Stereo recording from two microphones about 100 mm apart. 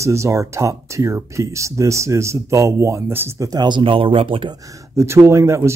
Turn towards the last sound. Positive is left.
turn(degrees=-25)  # may be behind; listen again after turning